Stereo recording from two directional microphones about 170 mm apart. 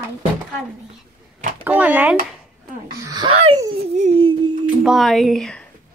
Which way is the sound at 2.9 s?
20° right (ahead or behind).